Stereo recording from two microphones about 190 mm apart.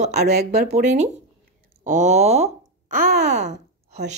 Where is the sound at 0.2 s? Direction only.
55° right (ahead or behind).